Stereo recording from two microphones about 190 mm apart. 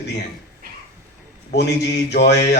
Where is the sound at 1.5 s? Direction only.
60° left (ahead or behind).